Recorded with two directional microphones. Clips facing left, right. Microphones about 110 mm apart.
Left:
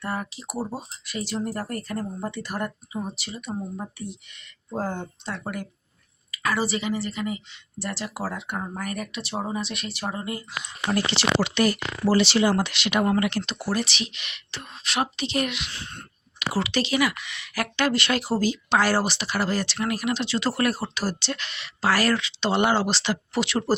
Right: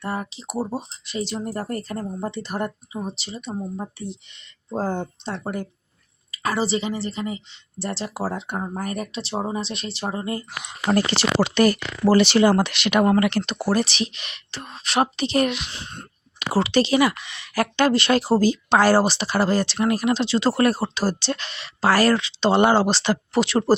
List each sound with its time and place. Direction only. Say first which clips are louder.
0.0 s speech: right 2 dB; 25° right (ahead or behind)
10.9 s speech: right 3 dB; 40° right (ahead or behind)
15.7 s speech: right 2 dB; 20° right (ahead or behind)
16.5 s speech: right 6 dB; 35° right (ahead or behind)